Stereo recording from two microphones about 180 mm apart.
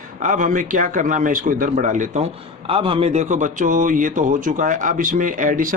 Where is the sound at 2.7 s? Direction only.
30° right (ahead or behind).